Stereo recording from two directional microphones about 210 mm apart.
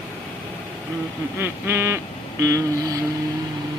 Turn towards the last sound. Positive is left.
turn(degrees=-15)  # may be behind; listen again after turning